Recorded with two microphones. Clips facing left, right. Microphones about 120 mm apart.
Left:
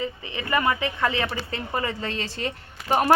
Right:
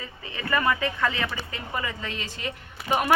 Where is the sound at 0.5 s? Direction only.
20° left (ahead or behind).